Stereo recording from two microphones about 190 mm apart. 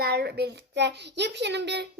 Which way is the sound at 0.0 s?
60° right (ahead or behind).